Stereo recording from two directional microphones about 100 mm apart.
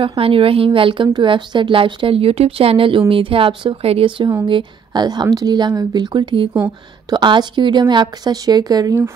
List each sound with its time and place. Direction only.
0.0 s speech: 65° right (ahead or behind)
0.7 s a woman's voice: 60° right (ahead or behind)
4.5 s speech: 50° right (ahead or behind)